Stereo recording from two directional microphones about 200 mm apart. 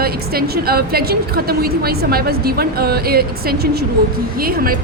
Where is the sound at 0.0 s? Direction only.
50° right (ahead or behind).